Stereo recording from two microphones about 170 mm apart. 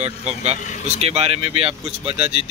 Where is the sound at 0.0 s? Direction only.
40° right (ahead or behind).